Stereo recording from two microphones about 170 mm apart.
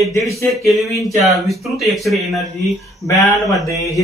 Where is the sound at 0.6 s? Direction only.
Centre (ahead or behind).